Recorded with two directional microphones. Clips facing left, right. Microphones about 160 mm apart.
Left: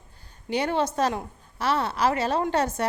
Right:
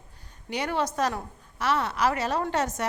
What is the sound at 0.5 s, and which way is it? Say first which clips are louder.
A woman's voice: left 3 dB; 30° left (ahead or behind).